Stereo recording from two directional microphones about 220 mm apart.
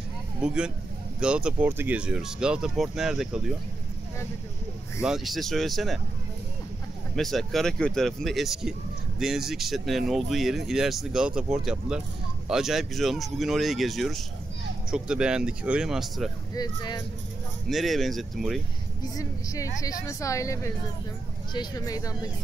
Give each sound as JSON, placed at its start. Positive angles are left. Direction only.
{"t": 0.4, "sound": "speech", "side_deg": -5}
{"t": 5.0, "sound": "speech", "side_deg": 0}
{"t": 7.2, "sound": "speech", "side_deg": 0}
{"t": 16.5, "sound": "speech", "side_deg": 20}
{"t": 17.6, "sound": "speech", "side_deg": 0}
{"t": 19.1, "sound": "speech", "side_deg": 15}